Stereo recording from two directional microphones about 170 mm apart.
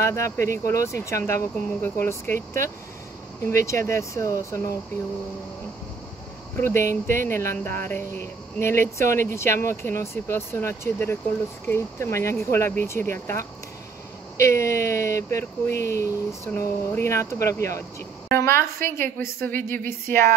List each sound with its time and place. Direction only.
0.0 s speech: 15° left (ahead or behind)
3.6 s speech: 15° left (ahead or behind)
6.6 s speech: 15° left (ahead or behind)